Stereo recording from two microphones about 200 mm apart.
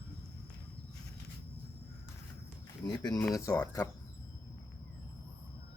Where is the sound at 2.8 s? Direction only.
20° left (ahead or behind).